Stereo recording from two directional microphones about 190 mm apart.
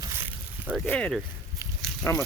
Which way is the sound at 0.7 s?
5° left (ahead or behind).